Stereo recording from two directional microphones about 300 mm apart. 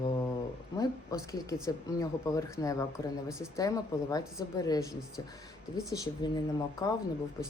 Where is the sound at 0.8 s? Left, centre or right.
Centre.